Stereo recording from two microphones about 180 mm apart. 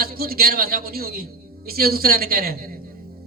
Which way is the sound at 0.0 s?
55° right (ahead or behind).